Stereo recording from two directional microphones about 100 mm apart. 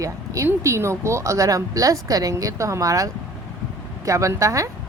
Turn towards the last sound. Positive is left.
turn(degrees=-30)  # may be behind; listen again after turning